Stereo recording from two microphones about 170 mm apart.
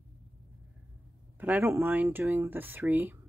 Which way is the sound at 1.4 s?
10° right (ahead or behind).